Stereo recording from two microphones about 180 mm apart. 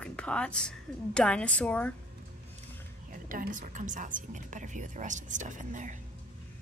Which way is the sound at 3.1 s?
50° right (ahead or behind).